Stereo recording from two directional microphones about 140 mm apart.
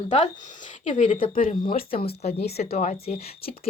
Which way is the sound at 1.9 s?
45° left (ahead or behind).